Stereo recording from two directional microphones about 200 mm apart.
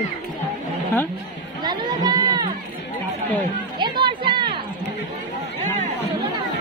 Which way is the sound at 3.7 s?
25° right (ahead or behind).